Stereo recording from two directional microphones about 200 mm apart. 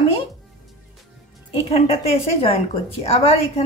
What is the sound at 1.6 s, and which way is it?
A woman's voice, 30° left (ahead or behind).